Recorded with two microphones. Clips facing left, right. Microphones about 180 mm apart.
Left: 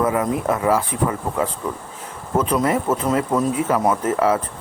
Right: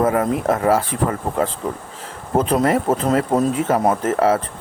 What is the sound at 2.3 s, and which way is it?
Speech, 30° right (ahead or behind).